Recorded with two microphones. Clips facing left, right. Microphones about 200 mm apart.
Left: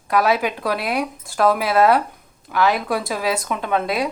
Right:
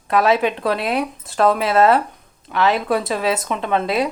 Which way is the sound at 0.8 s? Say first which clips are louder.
Right 2 dB; 25° right (ahead or behind).